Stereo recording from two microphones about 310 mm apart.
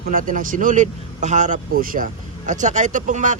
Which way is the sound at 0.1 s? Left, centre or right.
Right.